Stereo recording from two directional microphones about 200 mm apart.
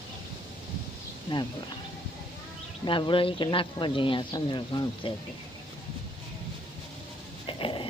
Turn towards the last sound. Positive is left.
turn(degrees=25)  # may be behind; listen again after turning